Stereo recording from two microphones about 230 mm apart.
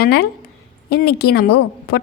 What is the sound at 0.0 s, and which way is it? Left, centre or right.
Speech, left.